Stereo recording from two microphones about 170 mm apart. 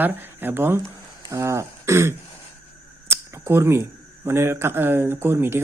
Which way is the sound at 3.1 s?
15° right (ahead or behind).